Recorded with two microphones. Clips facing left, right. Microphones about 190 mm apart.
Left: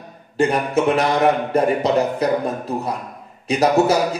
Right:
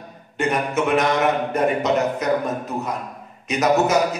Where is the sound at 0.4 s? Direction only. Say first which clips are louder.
Left 4 dB; 35° left (ahead or behind).